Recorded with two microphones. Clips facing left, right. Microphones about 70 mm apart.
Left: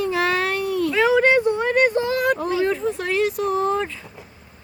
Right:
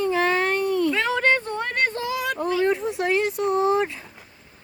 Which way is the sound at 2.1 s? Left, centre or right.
Left.